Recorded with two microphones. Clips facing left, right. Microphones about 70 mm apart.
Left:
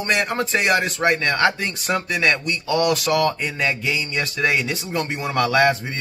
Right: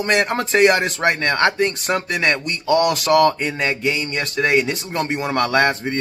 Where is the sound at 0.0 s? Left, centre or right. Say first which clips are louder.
Right 3 dB; right.